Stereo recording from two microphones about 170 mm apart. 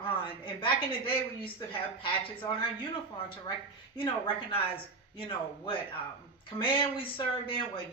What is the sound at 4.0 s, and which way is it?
A woman's voice, 30° left (ahead or behind).